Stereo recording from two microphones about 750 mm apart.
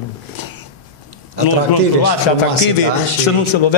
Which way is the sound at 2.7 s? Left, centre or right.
Left.